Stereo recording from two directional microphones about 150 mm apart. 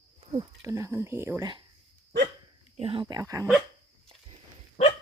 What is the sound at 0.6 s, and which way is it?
Speech, 20° right (ahead or behind).